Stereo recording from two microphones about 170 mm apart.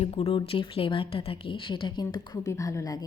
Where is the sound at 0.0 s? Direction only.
35° left (ahead or behind).